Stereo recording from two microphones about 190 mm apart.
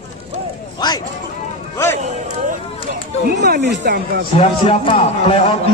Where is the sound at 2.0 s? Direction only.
40° right (ahead or behind).